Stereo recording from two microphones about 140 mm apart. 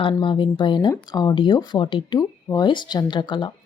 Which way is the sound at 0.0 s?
35° left (ahead or behind).